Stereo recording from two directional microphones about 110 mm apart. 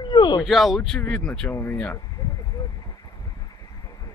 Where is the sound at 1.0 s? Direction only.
15° left (ahead or behind).